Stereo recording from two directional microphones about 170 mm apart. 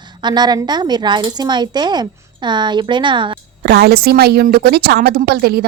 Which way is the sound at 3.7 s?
70° right (ahead or behind).